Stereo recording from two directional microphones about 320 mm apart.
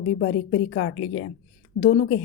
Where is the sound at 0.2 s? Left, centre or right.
Left.